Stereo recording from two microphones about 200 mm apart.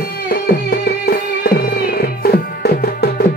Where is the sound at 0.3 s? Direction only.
50° left (ahead or behind).